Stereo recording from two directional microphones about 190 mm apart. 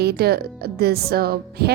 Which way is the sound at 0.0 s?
55° right (ahead or behind).